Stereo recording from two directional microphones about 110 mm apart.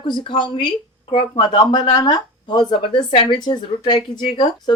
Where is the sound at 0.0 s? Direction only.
45° left (ahead or behind).